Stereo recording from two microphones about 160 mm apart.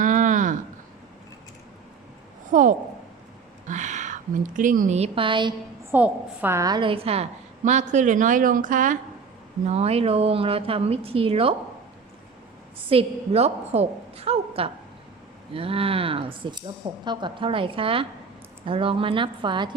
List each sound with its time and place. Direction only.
0.0 s a sound: 55° right (ahead or behind)
2.5 s a woman's voice: 55° right (ahead or behind)
3.7 s a sound: 50° right (ahead or behind)
4.9 s speech: 35° right (ahead or behind)
5.9 s a woman's voice: 10° right (ahead or behind); by 9.0 s 55° right (ahead or behind)
9.6 s speech: 40° right (ahead or behind)
12.9 s speech: 40° right (ahead or behind)